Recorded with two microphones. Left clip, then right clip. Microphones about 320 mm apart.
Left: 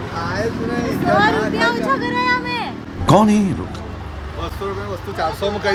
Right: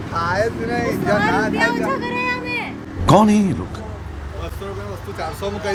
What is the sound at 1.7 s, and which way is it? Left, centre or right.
Music, centre.